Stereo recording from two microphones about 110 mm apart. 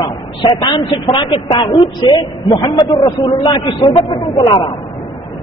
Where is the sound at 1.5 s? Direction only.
45° left (ahead or behind).